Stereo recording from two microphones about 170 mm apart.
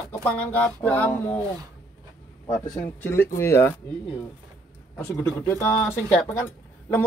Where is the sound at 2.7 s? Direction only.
10° left (ahead or behind).